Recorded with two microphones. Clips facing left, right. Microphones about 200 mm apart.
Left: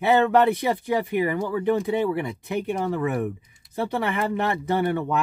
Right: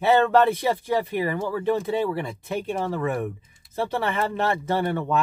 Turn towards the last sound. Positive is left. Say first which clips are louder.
# left 1 dB
turn(degrees=15)  # may be behind; listen again after turning